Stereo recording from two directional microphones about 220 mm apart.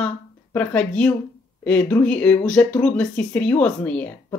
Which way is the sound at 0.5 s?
5° left (ahead or behind).